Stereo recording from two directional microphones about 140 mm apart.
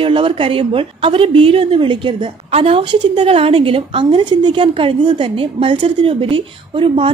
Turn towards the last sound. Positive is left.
turn(degrees=-40)  # may be behind; listen again after turning